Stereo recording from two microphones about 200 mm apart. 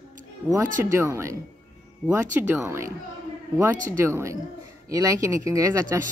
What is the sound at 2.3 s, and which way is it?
Speech, 10° right (ahead or behind).